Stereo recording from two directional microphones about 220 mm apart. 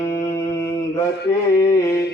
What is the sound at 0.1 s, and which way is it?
Mantra, 15° left (ahead or behind).